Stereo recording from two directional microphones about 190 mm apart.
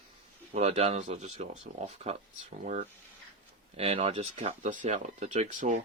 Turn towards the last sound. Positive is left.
turn(degrees=-40)  # may be behind; listen again after turning